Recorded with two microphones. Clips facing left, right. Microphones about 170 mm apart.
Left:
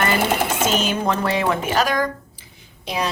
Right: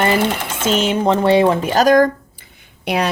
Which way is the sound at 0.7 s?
25° right (ahead or behind).